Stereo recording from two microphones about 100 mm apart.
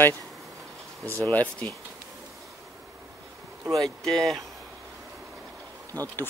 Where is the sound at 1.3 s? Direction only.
15° left (ahead or behind).